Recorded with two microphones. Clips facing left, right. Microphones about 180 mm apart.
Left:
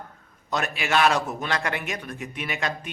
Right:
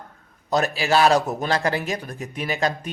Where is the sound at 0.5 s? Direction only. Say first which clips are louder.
Right 5 dB; 35° right (ahead or behind).